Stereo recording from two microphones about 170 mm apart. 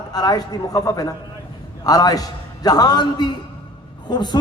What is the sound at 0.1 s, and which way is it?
A man's voice, 20° left (ahead or behind).